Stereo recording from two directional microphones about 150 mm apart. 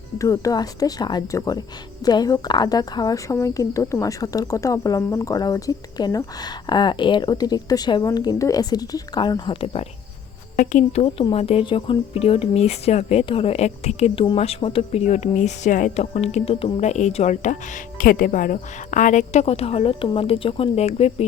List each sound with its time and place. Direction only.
0.2 s speech: 20° left (ahead or behind); by 9.8 s 40° left (ahead or behind)
10.6 s speech: 55° left (ahead or behind)
11.0 s speech: 35° left (ahead or behind)